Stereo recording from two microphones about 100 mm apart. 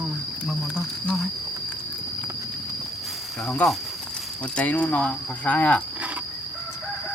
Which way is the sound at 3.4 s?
10° left (ahead or behind).